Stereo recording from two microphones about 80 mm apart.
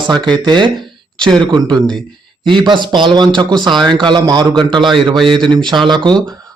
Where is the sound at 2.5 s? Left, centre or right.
Right.